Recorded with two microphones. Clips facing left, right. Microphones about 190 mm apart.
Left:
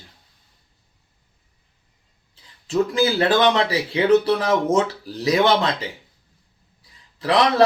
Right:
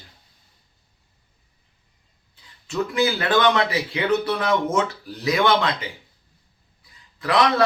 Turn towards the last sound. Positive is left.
turn(degrees=30)  # may be behind; listen again after turning